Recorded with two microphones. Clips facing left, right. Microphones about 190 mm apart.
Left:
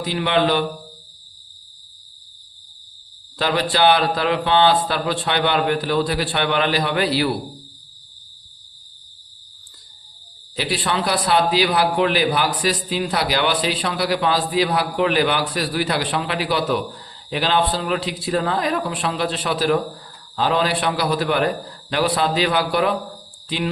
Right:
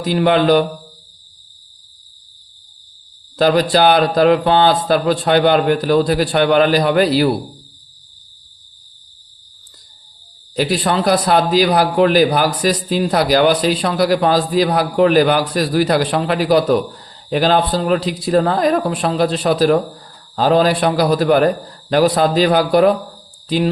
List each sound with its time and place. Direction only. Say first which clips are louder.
0.0 s a man's voice: right 6 dB; 45° right (ahead or behind)
3.3 s a man's voice: right 7 dB; 40° right (ahead or behind)
10.5 s a man's voice: right 6 dB; 45° right (ahead or behind)